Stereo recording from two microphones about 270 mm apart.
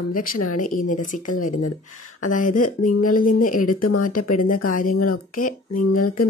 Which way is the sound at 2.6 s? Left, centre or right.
Left.